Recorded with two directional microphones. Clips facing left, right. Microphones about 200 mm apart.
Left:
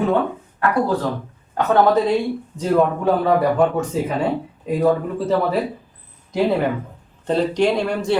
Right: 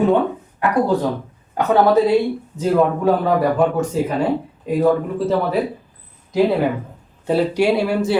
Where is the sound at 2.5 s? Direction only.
5° right (ahead or behind).